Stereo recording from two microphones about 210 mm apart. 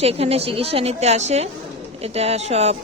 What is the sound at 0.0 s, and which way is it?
A woman's voice, 30° right (ahead or behind).